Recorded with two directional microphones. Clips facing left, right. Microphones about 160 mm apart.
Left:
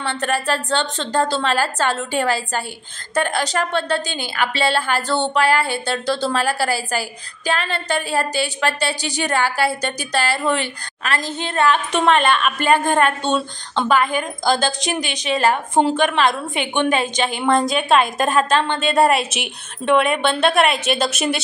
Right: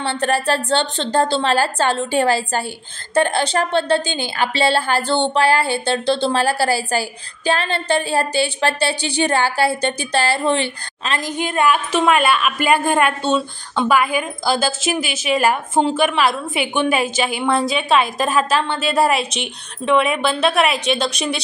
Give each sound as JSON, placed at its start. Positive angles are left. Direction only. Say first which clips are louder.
{"t": 0.0, "sound": "a woman's voice", "louder": "right 3 dB", "side_deg": -30}
{"t": 11.1, "sound": "a woman's voice", "louder": "right 2 dB", "side_deg": -15}